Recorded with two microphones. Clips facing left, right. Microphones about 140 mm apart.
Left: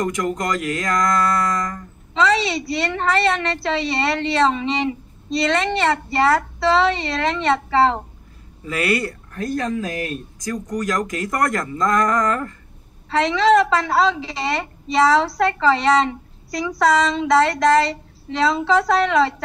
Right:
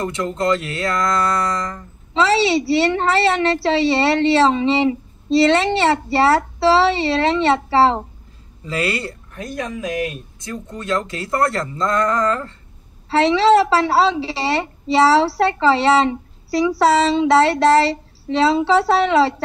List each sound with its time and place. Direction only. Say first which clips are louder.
0.0 s a woman's voice: right 1 dB; 25° right (ahead or behind)